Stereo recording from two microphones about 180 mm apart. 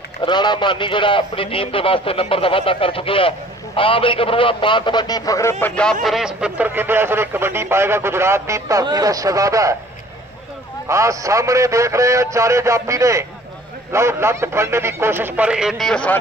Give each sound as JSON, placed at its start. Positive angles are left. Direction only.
{"t": 0.2, "sound": "a man's voice", "side_deg": 25}
{"t": 10.9, "sound": "speech", "side_deg": -15}